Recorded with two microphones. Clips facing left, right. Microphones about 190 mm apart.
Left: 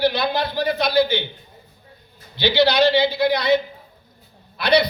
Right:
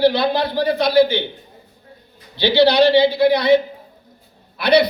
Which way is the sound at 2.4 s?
30° right (ahead or behind).